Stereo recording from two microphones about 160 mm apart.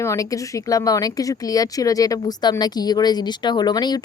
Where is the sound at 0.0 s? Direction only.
20° left (ahead or behind).